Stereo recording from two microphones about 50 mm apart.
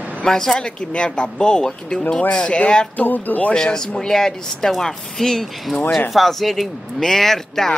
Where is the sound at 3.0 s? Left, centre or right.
Left.